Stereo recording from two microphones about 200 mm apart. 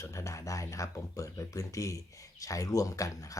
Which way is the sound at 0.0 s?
15° left (ahead or behind).